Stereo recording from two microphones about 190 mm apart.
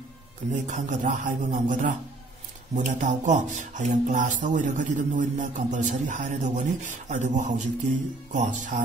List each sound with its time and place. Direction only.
0.7 s speech: 40° right (ahead or behind)